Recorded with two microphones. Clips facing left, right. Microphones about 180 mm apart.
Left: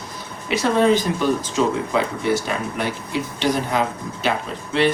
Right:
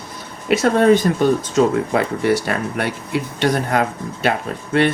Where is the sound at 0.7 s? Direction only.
55° right (ahead or behind).